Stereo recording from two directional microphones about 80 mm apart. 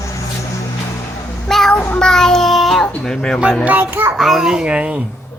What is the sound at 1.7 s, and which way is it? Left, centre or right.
Child singing, centre.